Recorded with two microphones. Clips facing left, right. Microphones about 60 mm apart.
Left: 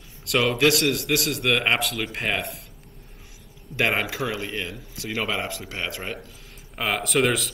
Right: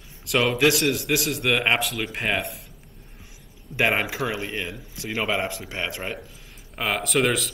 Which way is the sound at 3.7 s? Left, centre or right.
Right.